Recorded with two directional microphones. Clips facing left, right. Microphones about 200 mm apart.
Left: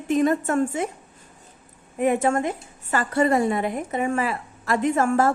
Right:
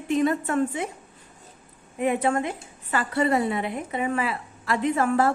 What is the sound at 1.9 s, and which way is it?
A woman's voice, 45° left (ahead or behind).